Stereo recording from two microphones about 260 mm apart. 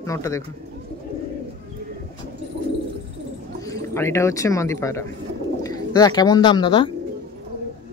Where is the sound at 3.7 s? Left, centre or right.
Centre.